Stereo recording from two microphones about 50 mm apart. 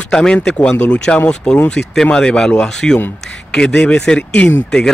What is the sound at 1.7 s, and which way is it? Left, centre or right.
A man's voice, centre.